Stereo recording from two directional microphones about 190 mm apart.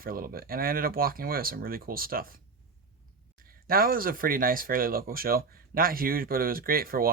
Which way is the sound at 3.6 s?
50° right (ahead or behind).